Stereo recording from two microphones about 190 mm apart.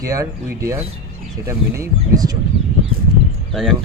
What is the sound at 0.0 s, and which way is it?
Speech, 15° right (ahead or behind).